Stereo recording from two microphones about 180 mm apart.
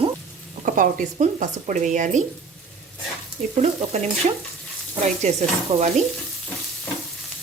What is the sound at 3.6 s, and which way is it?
Stir, 40° right (ahead or behind).